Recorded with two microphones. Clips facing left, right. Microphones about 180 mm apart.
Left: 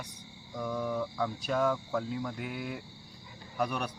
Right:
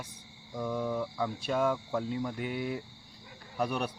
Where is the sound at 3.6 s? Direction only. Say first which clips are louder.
Right 1 dB; 5° right (ahead or behind).